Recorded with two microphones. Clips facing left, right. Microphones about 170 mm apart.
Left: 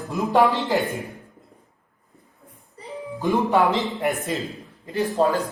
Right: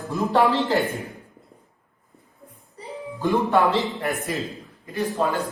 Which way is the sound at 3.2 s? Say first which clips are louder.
Even; 15° left (ahead or behind).